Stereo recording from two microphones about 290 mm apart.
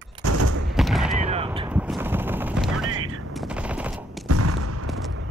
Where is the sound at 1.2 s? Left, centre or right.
Right; by 2.9 s centre.